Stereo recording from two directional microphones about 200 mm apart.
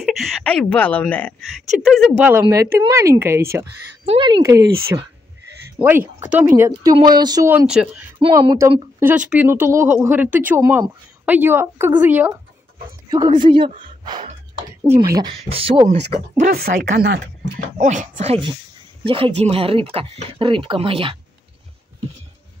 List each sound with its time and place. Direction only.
0.0 s speech: centre (ahead or behind)
1.9 s speech: 5° right (ahead or behind)
4.0 s speech: 25° right (ahead or behind); by 8.0 s 5° right (ahead or behind)
8.2 s speech: 20° right (ahead or behind)
13.1 s speech: 20° right (ahead or behind)
15.5 s speech: 25° right (ahead or behind)
16.5 s speech: 50° right (ahead or behind)
17.7 s speech: 40° right (ahead or behind)